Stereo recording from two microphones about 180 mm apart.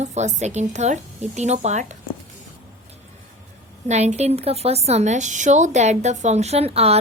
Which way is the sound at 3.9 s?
40° right (ahead or behind).